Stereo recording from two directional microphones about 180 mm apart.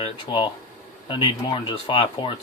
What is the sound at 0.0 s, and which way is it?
Speech, 30° left (ahead or behind).